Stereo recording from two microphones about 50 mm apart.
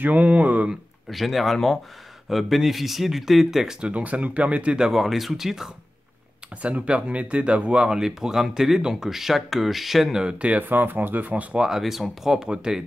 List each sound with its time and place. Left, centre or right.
0.0 s speech: right
1.0 s speech: centre
3.9 s speech: right
4.7 s speech: centre
6.6 s speech: right; by 10.1 s centre
10.1 s speech: right
10.6 s speech: right
11.5 s speech: centre